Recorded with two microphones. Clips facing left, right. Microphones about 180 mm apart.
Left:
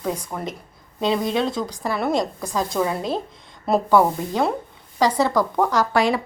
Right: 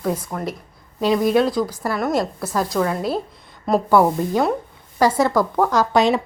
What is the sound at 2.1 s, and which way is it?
Speech, 5° right (ahead or behind).